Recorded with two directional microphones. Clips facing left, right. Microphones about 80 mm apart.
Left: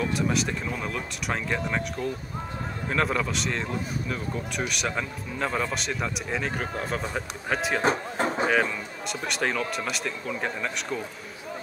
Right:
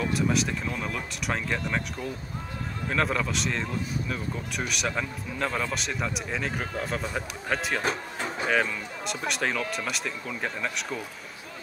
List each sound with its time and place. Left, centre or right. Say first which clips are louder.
0.0 s speech: even; centre
7.8 s a sound: left 5 dB; left
9.0 s speech: left 1 dB; centre